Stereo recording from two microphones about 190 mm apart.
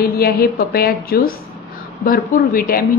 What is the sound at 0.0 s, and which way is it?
A woman's voice, 55° left (ahead or behind).